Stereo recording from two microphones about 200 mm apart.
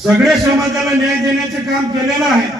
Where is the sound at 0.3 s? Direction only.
Centre (ahead or behind).